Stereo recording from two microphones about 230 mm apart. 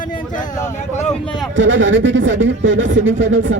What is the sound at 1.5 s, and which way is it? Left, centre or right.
Speech, right.